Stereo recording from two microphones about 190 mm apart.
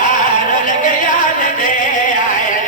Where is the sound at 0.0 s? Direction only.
40° left (ahead or behind).